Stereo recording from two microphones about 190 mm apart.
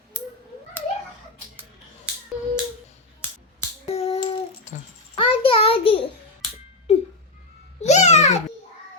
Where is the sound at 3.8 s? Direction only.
35° left (ahead or behind).